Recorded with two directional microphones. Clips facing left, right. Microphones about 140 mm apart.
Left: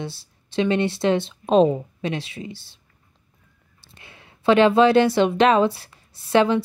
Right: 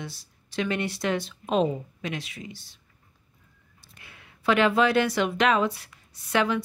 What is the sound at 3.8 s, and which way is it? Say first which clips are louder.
Speech: left 4 dB; 30° left (ahead or behind).